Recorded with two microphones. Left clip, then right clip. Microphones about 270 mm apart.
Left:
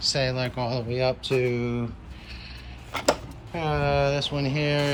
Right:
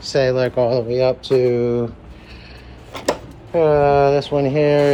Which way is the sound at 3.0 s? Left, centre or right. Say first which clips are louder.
Right 3 dB; centre.